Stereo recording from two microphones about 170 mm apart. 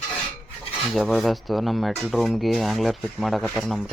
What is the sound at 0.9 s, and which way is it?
Speech, centre (ahead or behind).